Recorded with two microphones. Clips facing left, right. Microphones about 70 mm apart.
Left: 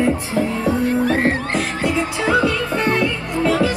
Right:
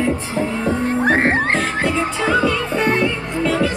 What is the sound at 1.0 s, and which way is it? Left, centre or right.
Music, right.